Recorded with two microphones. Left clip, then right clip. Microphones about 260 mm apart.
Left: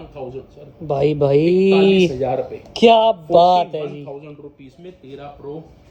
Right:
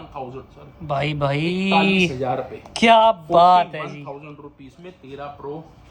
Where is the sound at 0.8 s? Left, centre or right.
Centre.